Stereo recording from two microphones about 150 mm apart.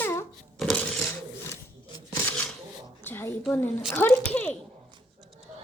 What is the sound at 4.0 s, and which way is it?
Speech, 10° left (ahead or behind).